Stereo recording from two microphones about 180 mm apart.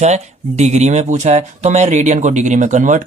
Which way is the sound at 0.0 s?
40° right (ahead or behind).